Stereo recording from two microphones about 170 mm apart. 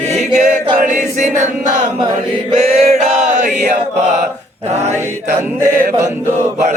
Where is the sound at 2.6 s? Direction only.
40° right (ahead or behind).